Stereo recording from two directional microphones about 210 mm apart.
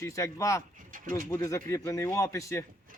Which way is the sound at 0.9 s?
40° right (ahead or behind).